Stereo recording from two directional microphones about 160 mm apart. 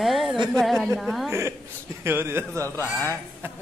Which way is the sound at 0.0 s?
Centre (ahead or behind).